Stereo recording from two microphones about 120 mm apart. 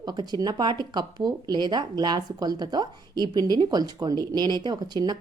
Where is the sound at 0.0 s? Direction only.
35° right (ahead or behind).